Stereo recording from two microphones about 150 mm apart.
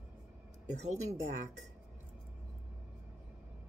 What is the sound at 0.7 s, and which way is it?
Speech, 50° right (ahead or behind).